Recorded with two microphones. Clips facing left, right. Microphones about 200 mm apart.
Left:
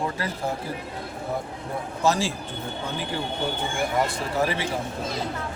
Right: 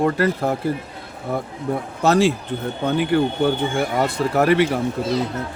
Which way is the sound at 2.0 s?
65° right (ahead or behind).